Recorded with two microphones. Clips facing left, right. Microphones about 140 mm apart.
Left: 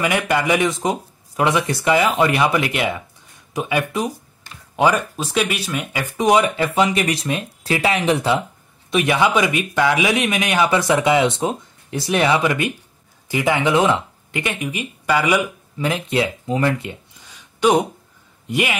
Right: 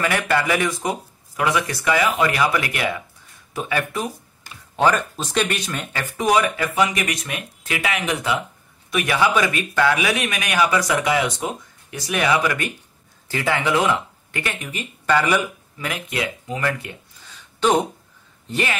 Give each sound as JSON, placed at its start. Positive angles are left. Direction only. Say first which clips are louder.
{"t": 0.0, "sound": "speech", "louder": "left 2 dB", "side_deg": 15}
{"t": 15.8, "sound": "speech", "louder": "left 6 dB", "side_deg": 25}
{"t": 17.6, "sound": "speech", "louder": "left 2 dB", "side_deg": 10}